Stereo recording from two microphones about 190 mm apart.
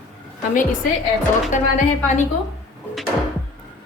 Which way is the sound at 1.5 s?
40° left (ahead or behind).